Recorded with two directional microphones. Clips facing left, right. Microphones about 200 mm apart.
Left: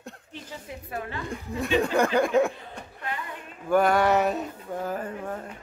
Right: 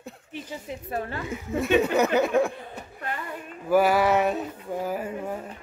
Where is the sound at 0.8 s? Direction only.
35° right (ahead or behind).